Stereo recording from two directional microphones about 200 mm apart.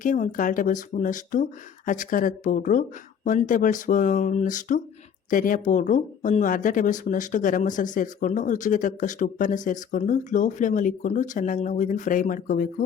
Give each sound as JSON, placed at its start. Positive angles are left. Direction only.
{"t": 0.0, "sound": "speech", "side_deg": 40}